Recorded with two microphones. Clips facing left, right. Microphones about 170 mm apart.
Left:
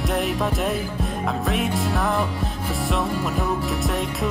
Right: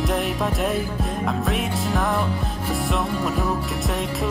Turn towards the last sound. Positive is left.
turn(degrees=0)  # may be behind; listen again after turning